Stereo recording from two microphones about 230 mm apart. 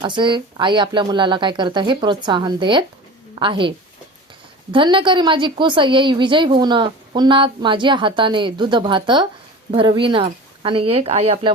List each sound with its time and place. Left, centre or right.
0.0 s a woman's voice: right